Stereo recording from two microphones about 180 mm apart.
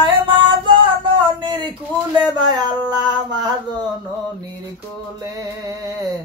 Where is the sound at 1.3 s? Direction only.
25° right (ahead or behind).